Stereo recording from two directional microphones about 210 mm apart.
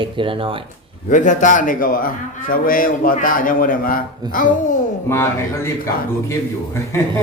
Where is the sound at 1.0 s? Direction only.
35° left (ahead or behind).